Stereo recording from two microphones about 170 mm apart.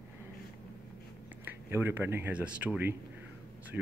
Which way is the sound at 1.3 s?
10° right (ahead or behind).